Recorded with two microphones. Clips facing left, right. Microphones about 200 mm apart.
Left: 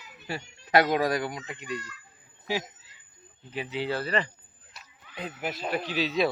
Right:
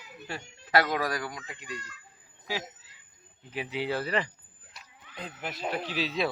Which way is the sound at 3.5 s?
10° right (ahead or behind).